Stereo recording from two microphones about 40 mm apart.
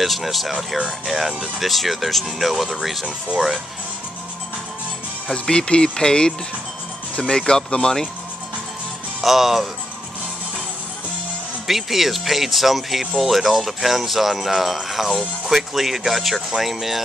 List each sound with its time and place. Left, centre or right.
0.0 s speech: centre
5.3 s speech: left
9.2 s speech: centre
11.6 s speech: centre